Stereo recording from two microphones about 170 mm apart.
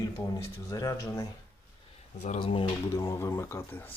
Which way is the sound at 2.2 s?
40° left (ahead or behind).